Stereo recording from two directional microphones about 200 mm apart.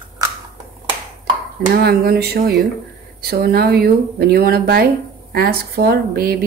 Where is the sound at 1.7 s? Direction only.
50° right (ahead or behind).